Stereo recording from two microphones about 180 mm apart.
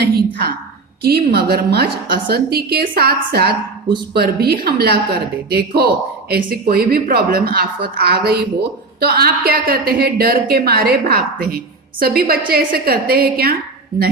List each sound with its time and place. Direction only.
0.1 s a woman's voice: 60° right (ahead or behind)